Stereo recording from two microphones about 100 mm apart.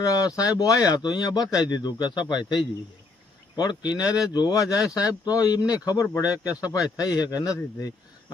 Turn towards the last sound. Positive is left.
turn(degrees=40)  # may be behind; listen again after turning